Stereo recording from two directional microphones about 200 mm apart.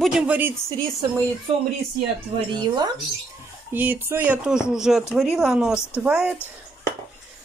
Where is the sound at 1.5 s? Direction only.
30° right (ahead or behind).